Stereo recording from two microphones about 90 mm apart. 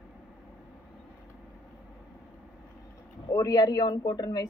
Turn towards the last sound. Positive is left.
turn(degrees=45)  # may be behind; listen again after turning